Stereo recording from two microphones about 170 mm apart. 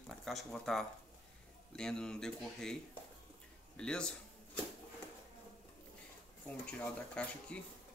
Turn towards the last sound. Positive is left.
turn(degrees=5)  # may be behind; listen again after turning